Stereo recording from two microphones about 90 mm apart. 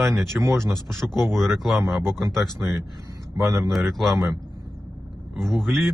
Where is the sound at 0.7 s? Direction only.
5° left (ahead or behind).